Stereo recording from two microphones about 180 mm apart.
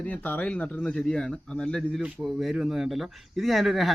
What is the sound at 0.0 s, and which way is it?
A man's voice, 10° left (ahead or behind).